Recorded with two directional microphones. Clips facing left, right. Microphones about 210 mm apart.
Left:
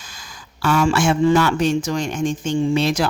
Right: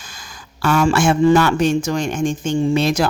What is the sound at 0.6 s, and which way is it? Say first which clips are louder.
A man's voice: right 2 dB; 45° right (ahead or behind).